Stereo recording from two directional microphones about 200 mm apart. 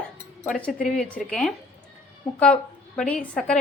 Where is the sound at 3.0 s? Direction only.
5° left (ahead or behind).